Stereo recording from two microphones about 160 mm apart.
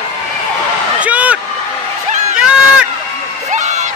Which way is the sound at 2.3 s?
5° right (ahead or behind).